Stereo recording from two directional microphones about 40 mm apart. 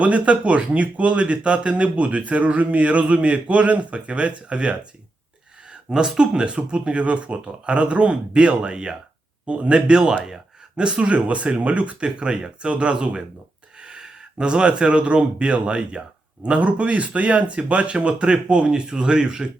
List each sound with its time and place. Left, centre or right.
0.0 s speech: right
5.9 s speech: centre